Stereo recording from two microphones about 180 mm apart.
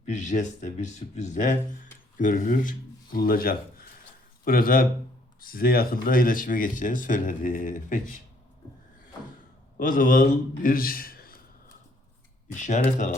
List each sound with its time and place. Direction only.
0.0 s speech: 40° left (ahead or behind)
9.7 s speech: 50° left (ahead or behind)
12.5 s speech: 40° left (ahead or behind)